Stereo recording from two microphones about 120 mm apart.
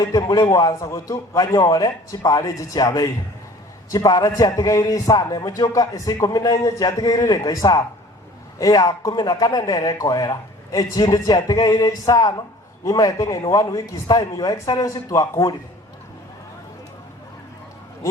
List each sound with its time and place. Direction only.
0.1 s a man's voice: 30° left (ahead or behind)